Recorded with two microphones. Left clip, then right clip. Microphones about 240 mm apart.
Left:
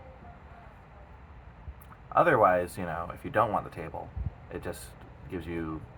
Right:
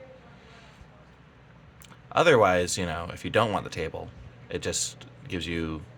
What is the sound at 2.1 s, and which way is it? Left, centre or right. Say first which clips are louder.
Speech: right 2 dB; right.